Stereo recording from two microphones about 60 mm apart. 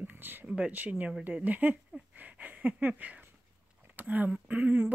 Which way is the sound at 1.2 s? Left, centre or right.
Right.